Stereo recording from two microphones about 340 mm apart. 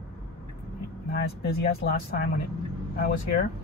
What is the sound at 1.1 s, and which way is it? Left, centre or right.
Speech, left.